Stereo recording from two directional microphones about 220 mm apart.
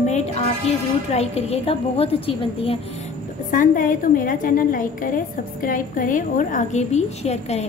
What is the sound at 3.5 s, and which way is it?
A woman's voice, 40° left (ahead or behind).